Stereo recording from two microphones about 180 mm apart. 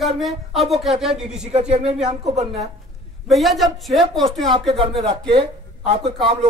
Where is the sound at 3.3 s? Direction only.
Centre (ahead or behind).